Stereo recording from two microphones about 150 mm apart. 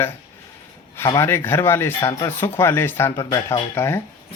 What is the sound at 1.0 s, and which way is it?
Speech, 20° left (ahead or behind).